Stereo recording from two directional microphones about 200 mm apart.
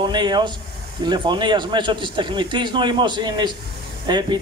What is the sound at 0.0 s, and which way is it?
A man's voice, 20° right (ahead or behind).